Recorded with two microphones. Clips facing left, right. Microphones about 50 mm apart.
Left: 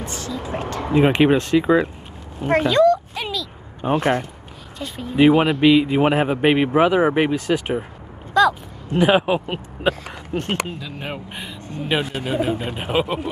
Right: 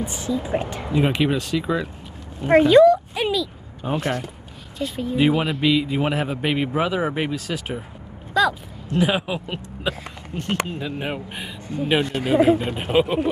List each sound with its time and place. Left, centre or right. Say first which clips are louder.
0.0 s speech: right 3 dB; centre
0.9 s speech: left 5 dB; left
2.4 s speech: right 3 dB; centre
2.7 s a sound: right 2 dB; centre
3.8 s speech: left 5 dB; left
4.7 s speech: right 4 dB; centre
5.1 s speech: left 6 dB; left
5.7 s speech: left 5 dB; left
8.3 s a sound: left 3 dB; centre
8.9 s speech: left 5 dB; left
10.3 s speech: left 7 dB; left
10.9 s speech: right 3 dB; centre
11.1 s speech: even; centre